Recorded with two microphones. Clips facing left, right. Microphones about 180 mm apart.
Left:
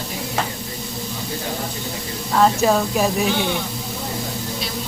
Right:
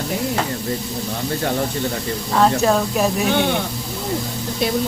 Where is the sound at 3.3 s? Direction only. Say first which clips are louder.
Right 3 dB; 55° right (ahead or behind).